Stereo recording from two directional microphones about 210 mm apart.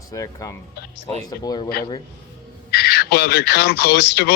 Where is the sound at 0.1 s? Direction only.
15° left (ahead or behind).